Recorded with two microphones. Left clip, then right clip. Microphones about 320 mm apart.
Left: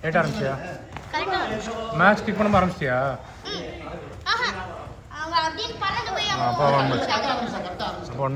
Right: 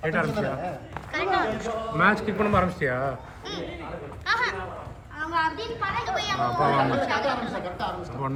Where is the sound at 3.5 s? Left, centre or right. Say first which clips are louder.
Left 1 dB; centre.